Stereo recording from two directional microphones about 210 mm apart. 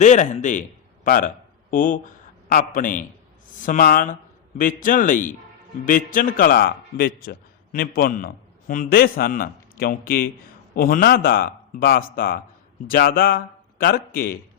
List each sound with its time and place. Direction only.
0.0 s a man's voice: 35° left (ahead or behind)